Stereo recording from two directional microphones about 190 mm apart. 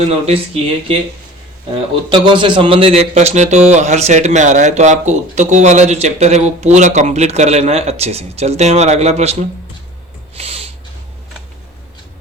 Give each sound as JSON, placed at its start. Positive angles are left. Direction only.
{"t": 0.3, "sound": "speech", "side_deg": -30}
{"t": 2.0, "sound": "speech", "side_deg": -25}
{"t": 10.3, "sound": "a sound", "side_deg": -30}